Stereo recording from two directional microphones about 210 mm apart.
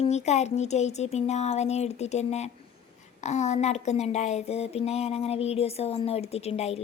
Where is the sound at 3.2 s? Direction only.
30° left (ahead or behind).